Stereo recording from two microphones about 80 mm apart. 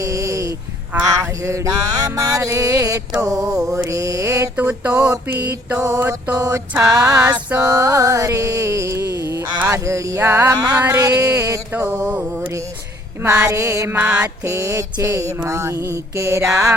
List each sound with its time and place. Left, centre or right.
0.0 s sheep: right
1.0 s music: right
4.5 s a sound: centre
4.9 s music: right
5.3 s mantra: right
5.7 s music: right
6.0 s mantra: right
6.3 s music: right
13.2 s music: right
13.9 s mantra: centre
14.4 s music: right